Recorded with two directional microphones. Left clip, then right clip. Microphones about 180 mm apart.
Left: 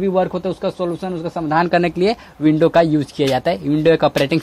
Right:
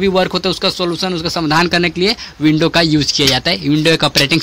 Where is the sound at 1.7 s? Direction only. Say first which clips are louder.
Right 2 dB; 5° left (ahead or behind).